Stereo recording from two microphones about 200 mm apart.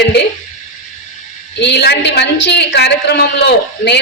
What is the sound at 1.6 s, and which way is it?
A woman's voice, 55° left (ahead or behind).